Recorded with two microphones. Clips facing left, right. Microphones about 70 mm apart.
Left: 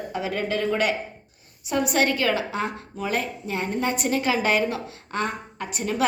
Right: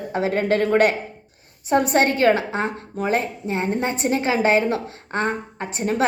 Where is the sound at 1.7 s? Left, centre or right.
Right.